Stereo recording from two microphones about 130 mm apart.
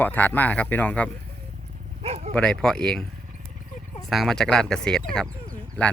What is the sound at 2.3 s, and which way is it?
Speech, 5° left (ahead or behind).